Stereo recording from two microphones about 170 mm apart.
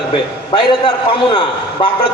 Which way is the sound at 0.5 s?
25° left (ahead or behind).